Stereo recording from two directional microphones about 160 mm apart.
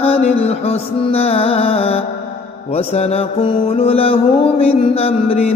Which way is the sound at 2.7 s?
40° left (ahead or behind).